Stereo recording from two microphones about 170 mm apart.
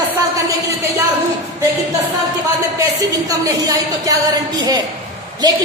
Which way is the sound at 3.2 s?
20° right (ahead or behind).